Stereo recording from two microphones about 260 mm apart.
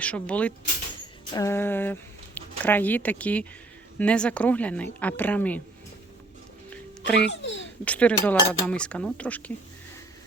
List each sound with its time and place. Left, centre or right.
0.0 s a woman's voice: centre
7.0 s a child's voice: centre
7.4 s babbling: left
7.9 s a woman's voice: centre